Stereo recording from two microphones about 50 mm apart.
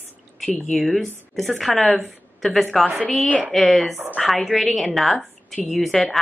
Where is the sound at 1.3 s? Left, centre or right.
Centre.